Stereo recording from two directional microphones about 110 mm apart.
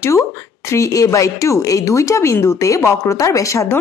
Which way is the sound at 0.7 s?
30° left (ahead or behind).